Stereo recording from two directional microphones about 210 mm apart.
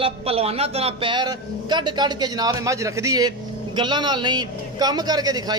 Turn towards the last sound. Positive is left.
turn(degrees=-20)  # may be behind; listen again after turning